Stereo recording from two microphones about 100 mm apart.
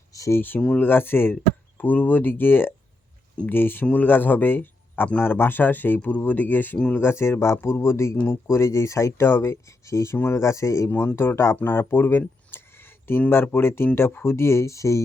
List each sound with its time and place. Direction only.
0.1 s speech: 30° left (ahead or behind)